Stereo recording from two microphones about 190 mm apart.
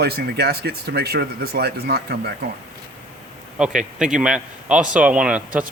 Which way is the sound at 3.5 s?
5° right (ahead or behind).